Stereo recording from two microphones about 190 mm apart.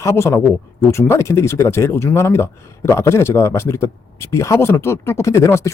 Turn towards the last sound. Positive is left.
turn(degrees=15)  # may be behind; listen again after turning